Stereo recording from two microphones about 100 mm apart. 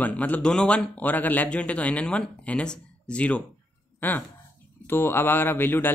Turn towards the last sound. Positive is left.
turn(degrees=20)  # may be behind; listen again after turning